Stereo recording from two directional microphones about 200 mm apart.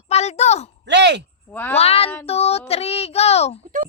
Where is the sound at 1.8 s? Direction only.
30° left (ahead or behind).